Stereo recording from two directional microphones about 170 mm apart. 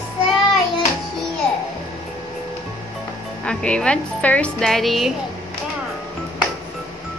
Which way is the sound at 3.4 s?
5° left (ahead or behind).